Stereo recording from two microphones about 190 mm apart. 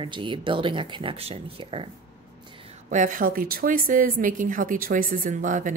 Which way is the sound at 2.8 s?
45° right (ahead or behind).